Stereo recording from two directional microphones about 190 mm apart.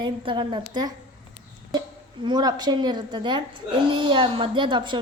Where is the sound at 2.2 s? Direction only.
20° right (ahead or behind).